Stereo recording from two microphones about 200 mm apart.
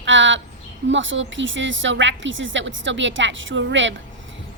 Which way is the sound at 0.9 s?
65° right (ahead or behind).